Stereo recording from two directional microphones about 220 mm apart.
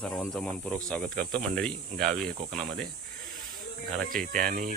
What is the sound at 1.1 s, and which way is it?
Speech, 45° right (ahead or behind).